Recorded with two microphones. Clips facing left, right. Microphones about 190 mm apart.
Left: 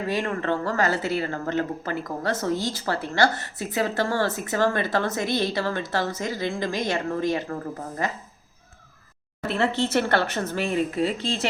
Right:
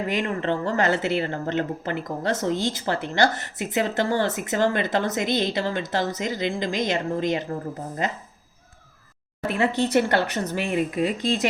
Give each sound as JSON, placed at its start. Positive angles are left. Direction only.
{"t": 0.1, "sound": "speech", "side_deg": -20}
{"t": 9.5, "sound": "speech", "side_deg": -15}